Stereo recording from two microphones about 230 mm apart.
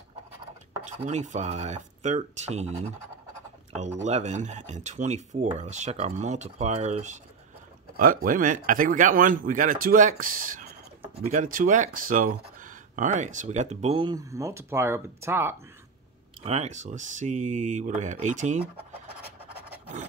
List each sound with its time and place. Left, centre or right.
0.8 s speech: right
4.0 s speech: right; by 15.5 s centre
16.4 s speech: right